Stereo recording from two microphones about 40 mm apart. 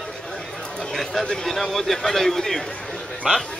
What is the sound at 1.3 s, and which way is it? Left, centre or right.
A man's voice, centre.